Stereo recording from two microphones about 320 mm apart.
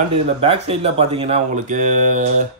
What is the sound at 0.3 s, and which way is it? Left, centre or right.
Speech, centre.